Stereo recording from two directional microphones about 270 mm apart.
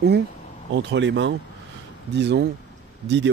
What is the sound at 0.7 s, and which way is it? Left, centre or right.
Speech, right.